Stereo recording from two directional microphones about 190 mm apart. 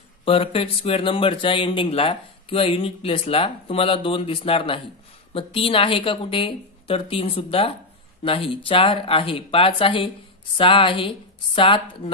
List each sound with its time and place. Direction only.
0.2 s speech: 30° left (ahead or behind)